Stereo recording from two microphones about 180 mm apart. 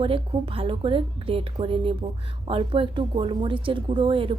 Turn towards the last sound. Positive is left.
turn(degrees=-30)  # may be behind; listen again after turning